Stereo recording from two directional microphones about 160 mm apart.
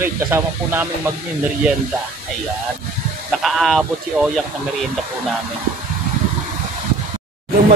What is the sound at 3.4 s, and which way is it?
Speech, centre (ahead or behind).